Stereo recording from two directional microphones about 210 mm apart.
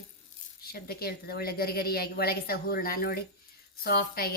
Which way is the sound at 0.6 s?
45° left (ahead or behind).